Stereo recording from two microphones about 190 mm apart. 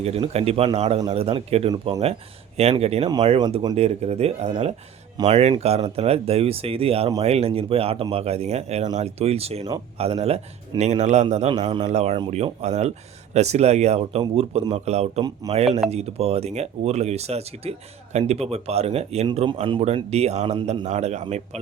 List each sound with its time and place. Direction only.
0.0 s speech: 30° right (ahead or behind)